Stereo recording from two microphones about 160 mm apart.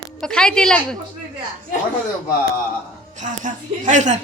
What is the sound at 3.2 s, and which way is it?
A man's voice, 50° right (ahead or behind).